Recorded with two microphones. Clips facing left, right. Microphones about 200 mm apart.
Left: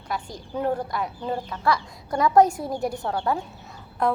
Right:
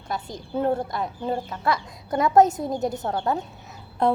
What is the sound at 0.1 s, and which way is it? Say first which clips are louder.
A woman's voice: right 2 dB; 25° right (ahead or behind).